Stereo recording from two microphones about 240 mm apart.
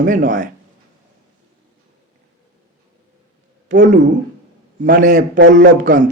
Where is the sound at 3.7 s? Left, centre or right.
Right.